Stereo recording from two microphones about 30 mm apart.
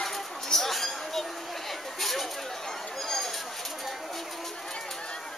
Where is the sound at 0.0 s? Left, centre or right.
Centre.